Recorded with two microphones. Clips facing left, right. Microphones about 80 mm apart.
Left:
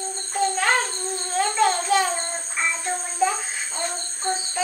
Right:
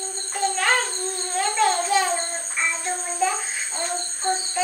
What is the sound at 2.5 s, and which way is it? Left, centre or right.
Music, centre.